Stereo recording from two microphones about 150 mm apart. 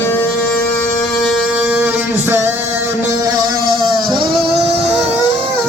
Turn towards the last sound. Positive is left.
turn(degrees=-30)  # may be behind; listen again after turning